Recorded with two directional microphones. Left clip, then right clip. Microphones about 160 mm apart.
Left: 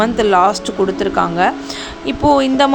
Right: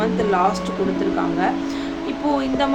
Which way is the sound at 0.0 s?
55° left (ahead or behind).